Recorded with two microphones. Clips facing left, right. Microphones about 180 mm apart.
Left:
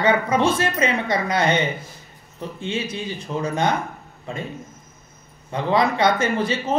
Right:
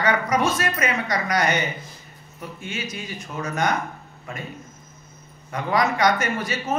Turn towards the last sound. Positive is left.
turn(degrees=30)  # may be behind; listen again after turning